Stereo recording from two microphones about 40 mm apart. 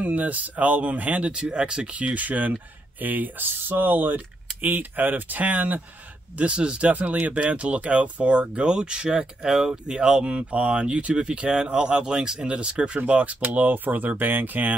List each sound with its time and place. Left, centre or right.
0.0 s speech: right
1.3 s speech: right
1.9 s speech: right
6.3 s speech: right
6.9 s speech: right; by 9.7 s centre
9.7 s speech: right
12.4 s speech: right
13.0 s speech: right